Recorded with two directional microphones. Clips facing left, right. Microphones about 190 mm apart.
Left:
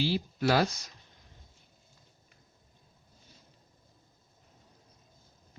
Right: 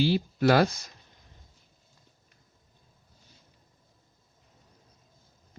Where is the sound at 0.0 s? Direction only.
55° right (ahead or behind).